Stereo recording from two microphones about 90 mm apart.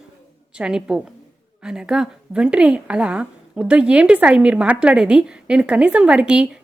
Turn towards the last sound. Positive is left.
turn(degrees=-10)  # may be behind; listen again after turning